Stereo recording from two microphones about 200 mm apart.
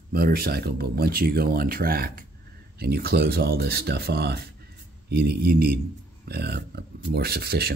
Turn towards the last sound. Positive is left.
turn(degrees=-50)  # may be behind; listen again after turning